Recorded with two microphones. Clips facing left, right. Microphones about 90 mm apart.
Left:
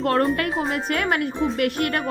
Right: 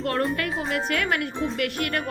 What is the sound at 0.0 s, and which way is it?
Speech, 45° left (ahead or behind).